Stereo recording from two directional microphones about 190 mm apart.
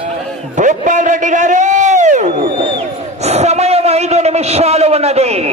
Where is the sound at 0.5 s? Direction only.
40° right (ahead or behind).